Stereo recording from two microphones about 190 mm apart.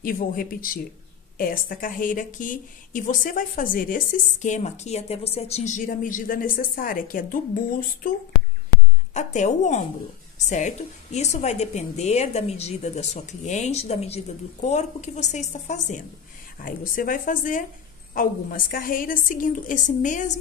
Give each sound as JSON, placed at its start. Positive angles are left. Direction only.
{"t": 0.0, "sound": "a woman's voice", "side_deg": 50}